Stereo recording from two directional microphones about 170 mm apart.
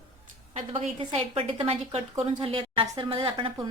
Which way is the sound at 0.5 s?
30° right (ahead or behind).